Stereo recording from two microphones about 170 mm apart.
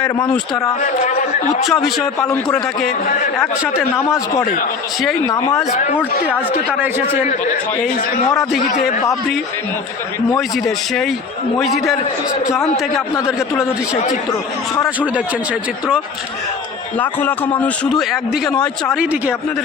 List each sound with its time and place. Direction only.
0.8 s a man's voice: 45° left (ahead or behind)
1.6 s a man's voice: centre (ahead or behind)
3.9 s a man's voice: 15° left (ahead or behind)
6.2 s a man's voice: 10° right (ahead or behind)
17.0 s a man's voice: 10° left (ahead or behind)
18.1 s a man's voice: centre (ahead or behind)